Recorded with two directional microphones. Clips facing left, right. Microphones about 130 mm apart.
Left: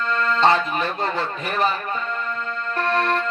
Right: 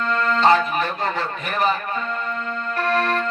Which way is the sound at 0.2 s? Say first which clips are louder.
Right 1 dB; 30° left (ahead or behind).